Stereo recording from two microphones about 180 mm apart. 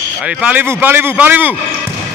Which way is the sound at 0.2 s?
5° right (ahead or behind).